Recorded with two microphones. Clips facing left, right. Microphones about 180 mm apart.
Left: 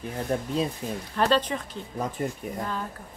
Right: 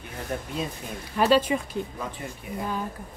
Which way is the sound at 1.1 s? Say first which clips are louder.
Right 3 dB; 10° right (ahead or behind).